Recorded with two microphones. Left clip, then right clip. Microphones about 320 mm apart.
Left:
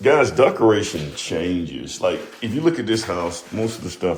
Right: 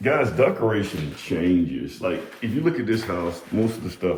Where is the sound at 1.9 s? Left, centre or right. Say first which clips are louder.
Left 6 dB; centre.